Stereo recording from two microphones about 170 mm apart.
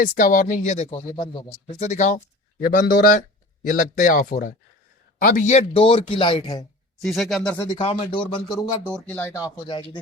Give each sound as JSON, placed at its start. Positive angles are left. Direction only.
{"t": 0.0, "sound": "speech", "side_deg": 55}
{"t": 1.1, "sound": "speech", "side_deg": 25}
{"t": 1.6, "sound": "speech", "side_deg": 40}
{"t": 7.0, "sound": "speech", "side_deg": 0}
{"t": 7.8, "sound": "speech", "side_deg": 35}
{"t": 8.3, "sound": "speech", "side_deg": 25}
{"t": 8.9, "sound": "speech", "side_deg": 10}
{"t": 9.6, "sound": "speech", "side_deg": 30}